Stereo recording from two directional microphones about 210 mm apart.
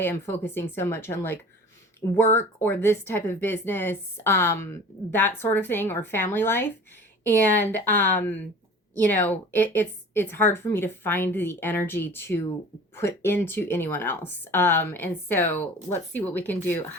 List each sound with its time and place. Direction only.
0.0 s a woman's voice: 10° left (ahead or behind)